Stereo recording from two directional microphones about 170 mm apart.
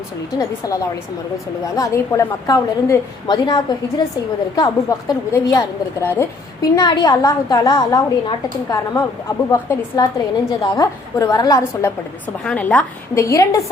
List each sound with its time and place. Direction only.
0.3 s a woman's voice: 20° left (ahead or behind)
6.7 s a woman's voice: 25° left (ahead or behind)
12.5 s a woman's voice: 5° left (ahead or behind)